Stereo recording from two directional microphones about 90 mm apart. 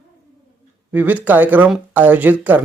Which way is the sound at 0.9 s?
20° right (ahead or behind).